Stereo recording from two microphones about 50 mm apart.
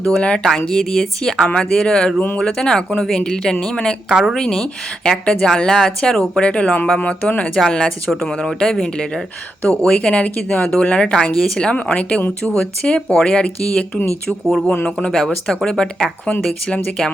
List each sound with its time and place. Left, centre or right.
0.0 s speech: left
0.3 s speech: centre
4.1 s speech: centre
4.4 s speech: centre
7.5 s speech: centre
11.7 s speech: left
14.3 s speech: centre